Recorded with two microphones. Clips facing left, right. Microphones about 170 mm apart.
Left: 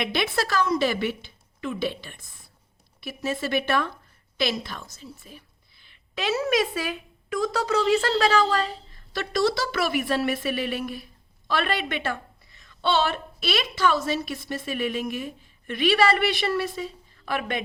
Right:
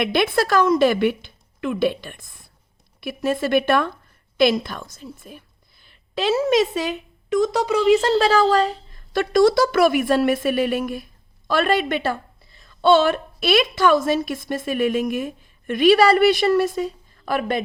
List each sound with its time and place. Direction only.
0.0 s a woman's voice: 55° right (ahead or behind)
5.8 s a woman's voice: 35° right (ahead or behind)